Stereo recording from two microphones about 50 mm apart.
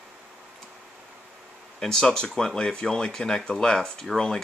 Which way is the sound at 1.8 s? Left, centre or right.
Centre.